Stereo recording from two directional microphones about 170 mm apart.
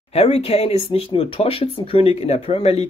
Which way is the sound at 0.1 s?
35° left (ahead or behind).